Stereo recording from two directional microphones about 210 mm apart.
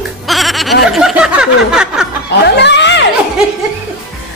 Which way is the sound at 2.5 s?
55° left (ahead or behind).